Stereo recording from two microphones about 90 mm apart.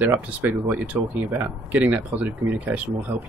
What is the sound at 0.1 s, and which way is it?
Speech, 20° right (ahead or behind).